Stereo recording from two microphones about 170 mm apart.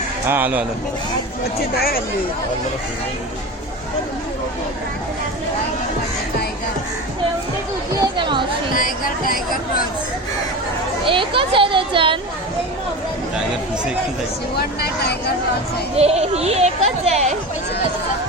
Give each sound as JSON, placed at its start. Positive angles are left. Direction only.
{"t": 0.3, "sound": "a man's voice", "side_deg": -10}
{"t": 1.5, "sound": "speech", "side_deg": 60}
{"t": 8.0, "sound": "chatter", "side_deg": -30}
{"t": 8.7, "sound": "speech", "side_deg": 55}
{"t": 11.0, "sound": "speech", "side_deg": -30}
{"t": 14.5, "sound": "speech", "side_deg": 70}
{"t": 16.0, "sound": "speech", "side_deg": -40}